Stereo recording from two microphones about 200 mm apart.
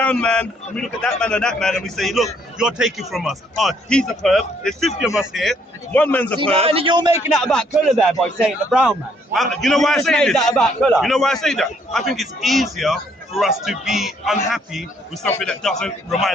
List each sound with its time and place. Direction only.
0.0 s a man's voice: 5° left (ahead or behind)
6.6 s a man's voice: 30° right (ahead or behind)
7.3 s a man's voice: centre (ahead or behind)